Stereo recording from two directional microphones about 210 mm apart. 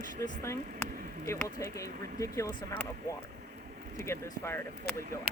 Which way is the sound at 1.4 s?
15° left (ahead or behind).